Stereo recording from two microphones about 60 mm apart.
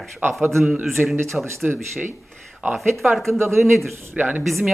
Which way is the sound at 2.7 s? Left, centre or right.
Centre.